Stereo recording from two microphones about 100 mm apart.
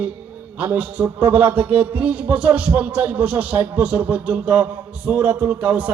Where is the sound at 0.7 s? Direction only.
15° right (ahead or behind).